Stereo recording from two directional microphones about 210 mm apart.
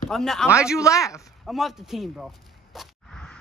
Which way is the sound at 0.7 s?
15° left (ahead or behind).